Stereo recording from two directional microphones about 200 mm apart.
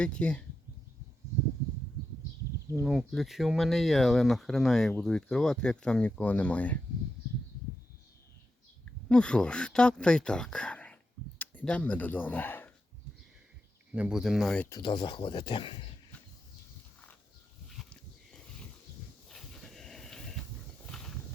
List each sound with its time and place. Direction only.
0.0 s speech: 5° left (ahead or behind)
2.8 s speech: centre (ahead or behind)
9.0 s speech: 5° left (ahead or behind)
13.9 s speech: 5° right (ahead or behind)
14.7 s speech: 20° left (ahead or behind)
17.7 s a sound: 5° left (ahead or behind)
20.8 s horse: 5° left (ahead or behind)